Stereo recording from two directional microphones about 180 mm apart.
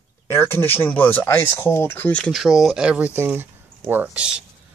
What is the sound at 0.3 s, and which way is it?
Speech, 10° left (ahead or behind).